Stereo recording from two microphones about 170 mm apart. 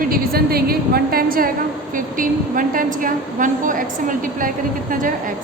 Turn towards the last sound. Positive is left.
turn(degrees=-50)  # may be behind; listen again after turning